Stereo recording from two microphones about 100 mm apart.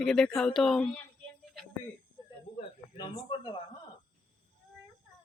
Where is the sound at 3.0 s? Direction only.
50° left (ahead or behind).